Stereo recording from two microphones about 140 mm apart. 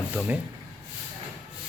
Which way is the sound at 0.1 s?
10° right (ahead or behind).